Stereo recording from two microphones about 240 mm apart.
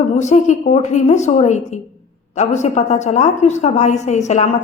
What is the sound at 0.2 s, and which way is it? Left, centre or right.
A woman's voice, left.